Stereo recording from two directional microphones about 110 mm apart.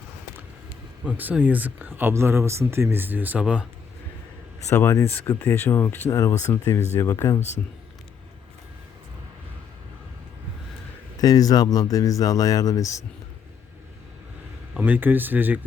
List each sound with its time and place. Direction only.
1.0 s speech: 15° right (ahead or behind)
4.7 s speech: 20° left (ahead or behind)
6.1 s speech: 30° left (ahead or behind)
11.2 s speech: 35° left (ahead or behind)
14.8 s speech: 15° right (ahead or behind)